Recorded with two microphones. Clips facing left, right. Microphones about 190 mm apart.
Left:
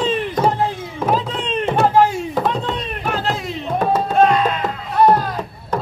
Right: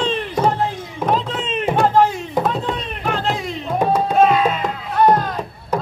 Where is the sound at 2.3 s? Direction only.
10° right (ahead or behind).